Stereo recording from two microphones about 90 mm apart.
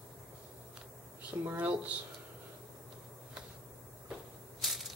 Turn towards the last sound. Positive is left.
turn(degrees=0)  # may be behind; listen again after turning